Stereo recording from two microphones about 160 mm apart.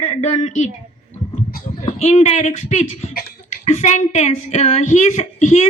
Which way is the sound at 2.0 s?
45° left (ahead or behind).